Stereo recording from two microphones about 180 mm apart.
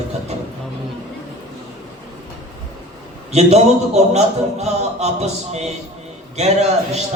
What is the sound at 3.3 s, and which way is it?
A man's voice, 35° right (ahead or behind).